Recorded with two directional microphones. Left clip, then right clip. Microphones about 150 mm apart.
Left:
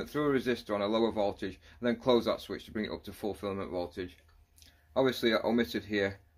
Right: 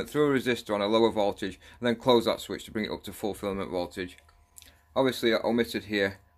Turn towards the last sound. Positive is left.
turn(degrees=-30)  # may be behind; listen again after turning